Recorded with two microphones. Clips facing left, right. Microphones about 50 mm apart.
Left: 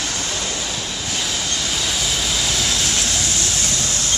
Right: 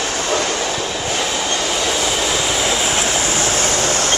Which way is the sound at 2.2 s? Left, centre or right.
Centre.